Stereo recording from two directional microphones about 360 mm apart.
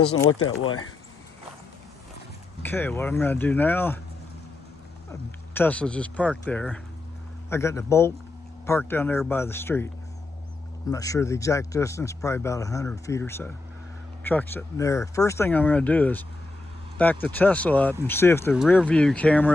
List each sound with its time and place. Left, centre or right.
0.0 s speech: left
2.6 s speech: centre
5.5 s speech: centre